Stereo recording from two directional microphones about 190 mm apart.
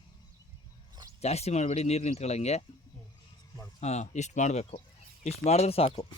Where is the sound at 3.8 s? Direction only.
35° left (ahead or behind).